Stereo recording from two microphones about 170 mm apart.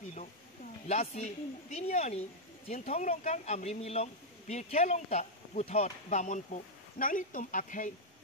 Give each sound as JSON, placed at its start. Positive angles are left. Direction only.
{"t": 0.8, "sound": "speech", "side_deg": 40}